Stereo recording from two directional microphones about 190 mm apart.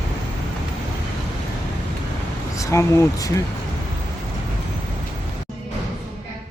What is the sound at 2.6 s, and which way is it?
Speech, 15° left (ahead or behind).